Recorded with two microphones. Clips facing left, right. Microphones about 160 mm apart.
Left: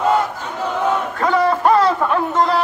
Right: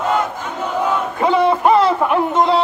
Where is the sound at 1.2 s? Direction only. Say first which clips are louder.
Right 2 dB; 20° right (ahead or behind).